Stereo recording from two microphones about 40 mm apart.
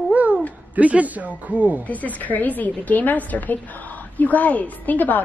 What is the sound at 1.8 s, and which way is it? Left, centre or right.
A woman's voice, left.